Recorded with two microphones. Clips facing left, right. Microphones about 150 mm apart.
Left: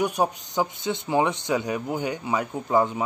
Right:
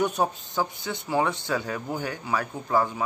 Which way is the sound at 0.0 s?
10° left (ahead or behind).